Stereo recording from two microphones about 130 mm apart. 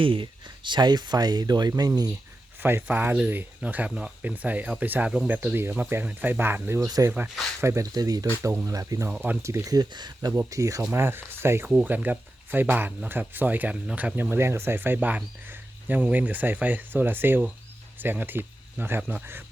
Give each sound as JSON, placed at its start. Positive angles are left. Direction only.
{"t": 0.0, "sound": "speech", "side_deg": -40}
{"t": 2.6, "sound": "speech", "side_deg": -15}
{"t": 9.0, "sound": "speech", "side_deg": -10}
{"t": 9.4, "sound": "speech", "side_deg": -20}
{"t": 11.7, "sound": "speech", "side_deg": -5}